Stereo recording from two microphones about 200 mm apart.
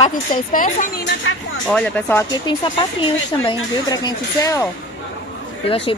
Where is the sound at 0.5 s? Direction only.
45° left (ahead or behind).